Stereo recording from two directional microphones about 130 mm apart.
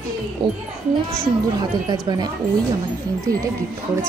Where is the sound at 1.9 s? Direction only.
30° right (ahead or behind).